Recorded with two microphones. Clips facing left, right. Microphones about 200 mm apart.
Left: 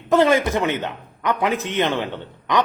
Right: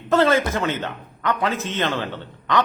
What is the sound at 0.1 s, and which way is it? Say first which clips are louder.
A man's voice: left 2 dB; 15° left (ahead or behind).